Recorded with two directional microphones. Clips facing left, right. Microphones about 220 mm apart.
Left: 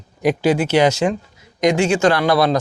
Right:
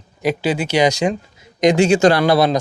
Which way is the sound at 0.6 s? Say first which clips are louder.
Right 2 dB; 10° right (ahead or behind).